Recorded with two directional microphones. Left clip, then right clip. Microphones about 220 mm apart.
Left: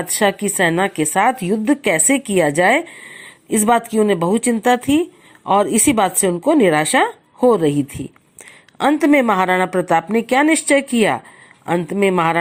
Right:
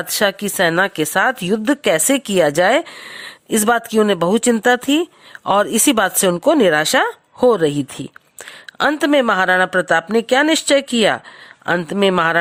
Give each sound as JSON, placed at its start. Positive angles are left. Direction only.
{"t": 0.2, "sound": "a woman's voice", "side_deg": -30}